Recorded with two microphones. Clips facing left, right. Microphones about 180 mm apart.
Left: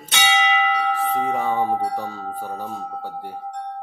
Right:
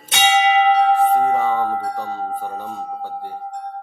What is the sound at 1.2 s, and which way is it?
Music, 10° left (ahead or behind).